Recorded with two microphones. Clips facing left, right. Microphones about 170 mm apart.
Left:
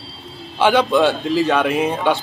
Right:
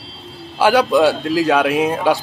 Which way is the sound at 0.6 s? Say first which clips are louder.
Right 2 dB; 5° right (ahead or behind).